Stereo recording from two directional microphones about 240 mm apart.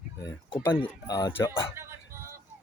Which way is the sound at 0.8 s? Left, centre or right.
Centre.